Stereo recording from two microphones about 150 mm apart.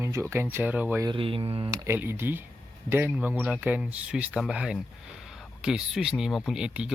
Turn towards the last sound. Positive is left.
turn(degrees=-5)  # may be behind; listen again after turning